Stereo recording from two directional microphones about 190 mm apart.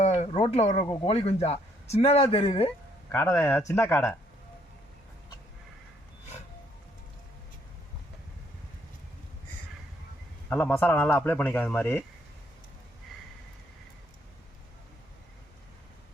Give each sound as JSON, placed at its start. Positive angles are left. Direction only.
{"t": 0.0, "sound": "a sound", "side_deg": 35}
{"t": 1.0, "sound": "speech", "side_deg": 30}
{"t": 3.1, "sound": "a man's voice", "side_deg": 10}
{"t": 10.5, "sound": "a man's voice", "side_deg": 10}